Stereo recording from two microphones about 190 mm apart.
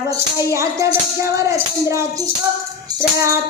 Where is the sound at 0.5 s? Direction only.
15° right (ahead or behind).